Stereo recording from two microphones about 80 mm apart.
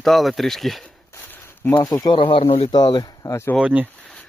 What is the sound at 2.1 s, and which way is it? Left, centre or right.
Speech, left.